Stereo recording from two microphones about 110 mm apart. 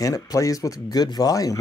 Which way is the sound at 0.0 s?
35° left (ahead or behind).